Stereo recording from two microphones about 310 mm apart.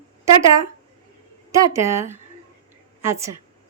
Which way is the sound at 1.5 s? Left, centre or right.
Centre.